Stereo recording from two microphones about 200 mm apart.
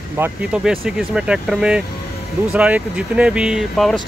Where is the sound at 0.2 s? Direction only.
5° right (ahead or behind).